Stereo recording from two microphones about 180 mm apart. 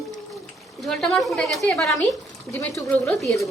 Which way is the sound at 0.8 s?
Centre (ahead or behind).